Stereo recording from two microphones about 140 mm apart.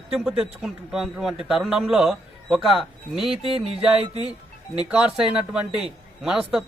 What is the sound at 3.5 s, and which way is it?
Music, 40° right (ahead or behind).